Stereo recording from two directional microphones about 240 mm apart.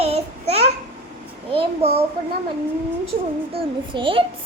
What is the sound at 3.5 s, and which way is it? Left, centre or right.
Speech, right.